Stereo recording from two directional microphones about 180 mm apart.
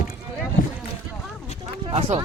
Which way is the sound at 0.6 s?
50° left (ahead or behind).